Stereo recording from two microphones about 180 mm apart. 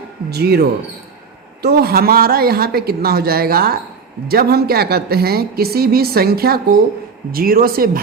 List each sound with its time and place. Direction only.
0.3 s a woman's voice: 60° right (ahead or behind)